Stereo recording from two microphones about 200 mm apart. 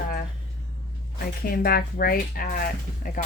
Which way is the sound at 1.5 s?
50° left (ahead or behind).